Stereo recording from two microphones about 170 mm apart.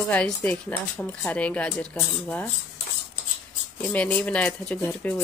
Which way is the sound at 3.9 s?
10° left (ahead or behind).